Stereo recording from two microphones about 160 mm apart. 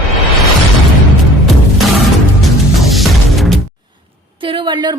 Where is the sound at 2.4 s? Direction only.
Centre (ahead or behind).